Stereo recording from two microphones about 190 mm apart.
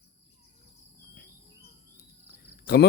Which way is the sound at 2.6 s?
55° left (ahead or behind).